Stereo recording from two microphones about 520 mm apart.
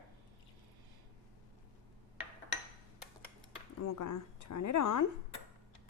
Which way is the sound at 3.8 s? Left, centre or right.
Left.